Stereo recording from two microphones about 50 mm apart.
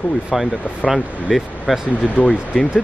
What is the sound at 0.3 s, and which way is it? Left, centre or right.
Speech, centre.